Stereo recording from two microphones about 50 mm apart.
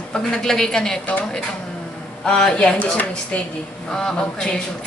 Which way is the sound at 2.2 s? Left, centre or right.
Centre.